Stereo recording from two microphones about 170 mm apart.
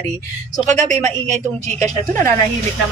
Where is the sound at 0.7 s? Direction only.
45° right (ahead or behind).